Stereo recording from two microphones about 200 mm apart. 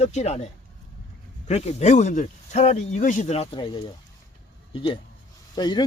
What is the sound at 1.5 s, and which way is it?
Speech, 30° left (ahead or behind).